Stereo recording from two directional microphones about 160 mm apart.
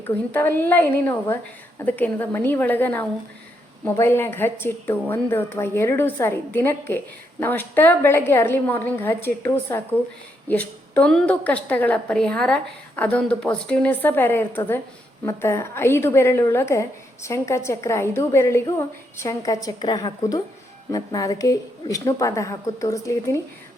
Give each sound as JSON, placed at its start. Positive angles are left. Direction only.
{"t": 0.0, "sound": "a woman's voice", "side_deg": 15}